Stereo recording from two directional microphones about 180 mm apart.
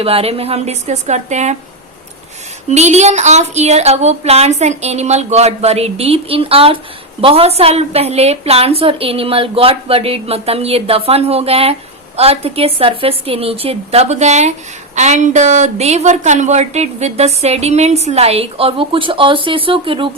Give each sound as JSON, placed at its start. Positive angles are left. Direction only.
{"t": 0.0, "sound": "a woman's voice", "side_deg": -35}
{"t": 2.6, "sound": "a woman's voice", "side_deg": -40}